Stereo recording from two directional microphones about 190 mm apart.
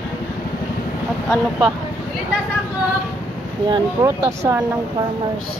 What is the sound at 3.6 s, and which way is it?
Speech, 25° right (ahead or behind).